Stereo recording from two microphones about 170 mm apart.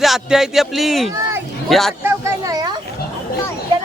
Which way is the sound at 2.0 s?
20° right (ahead or behind).